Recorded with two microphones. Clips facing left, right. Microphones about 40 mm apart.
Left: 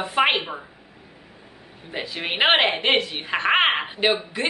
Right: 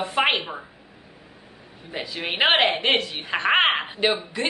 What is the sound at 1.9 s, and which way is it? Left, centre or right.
Speech, centre.